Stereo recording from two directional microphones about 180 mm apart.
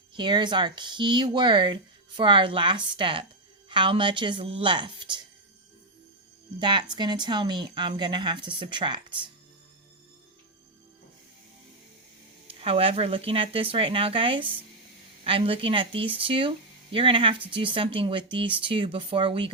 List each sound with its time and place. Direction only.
0.1 s speech: 25° right (ahead or behind)
6.6 s speech: 25° right (ahead or behind)
12.5 s speech: 30° right (ahead or behind)